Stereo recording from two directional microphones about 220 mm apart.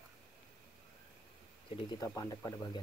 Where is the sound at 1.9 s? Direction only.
15° left (ahead or behind).